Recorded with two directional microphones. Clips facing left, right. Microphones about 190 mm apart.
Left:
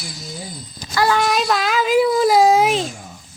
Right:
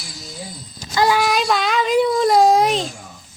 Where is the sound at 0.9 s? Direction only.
20° right (ahead or behind).